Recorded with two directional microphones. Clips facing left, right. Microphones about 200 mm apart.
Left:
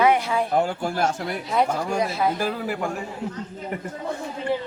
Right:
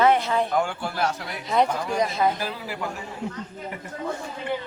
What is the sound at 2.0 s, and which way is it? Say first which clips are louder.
Speech: right 2 dB; 5° left (ahead or behind).